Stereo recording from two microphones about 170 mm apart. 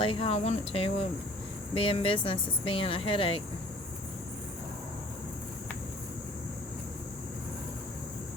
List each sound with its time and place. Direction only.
0.0 s speech: 35° left (ahead or behind)